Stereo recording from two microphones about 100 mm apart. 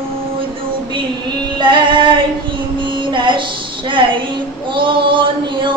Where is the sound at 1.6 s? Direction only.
55° right (ahead or behind).